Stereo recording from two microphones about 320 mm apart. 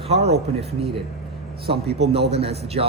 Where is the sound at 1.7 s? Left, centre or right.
Centre.